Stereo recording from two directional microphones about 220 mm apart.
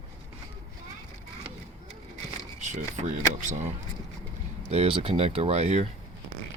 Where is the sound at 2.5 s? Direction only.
35° right (ahead or behind).